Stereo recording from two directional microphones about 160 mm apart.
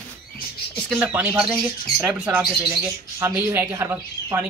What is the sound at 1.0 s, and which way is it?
Speech, 10° right (ahead or behind).